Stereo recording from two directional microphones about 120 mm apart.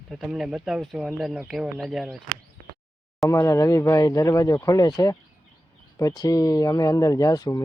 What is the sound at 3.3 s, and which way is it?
Speech, 25° left (ahead or behind).